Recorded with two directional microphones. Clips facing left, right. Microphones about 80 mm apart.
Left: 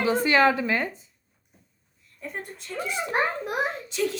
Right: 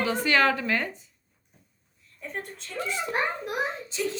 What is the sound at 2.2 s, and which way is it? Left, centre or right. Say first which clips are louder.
Speech: even; centre.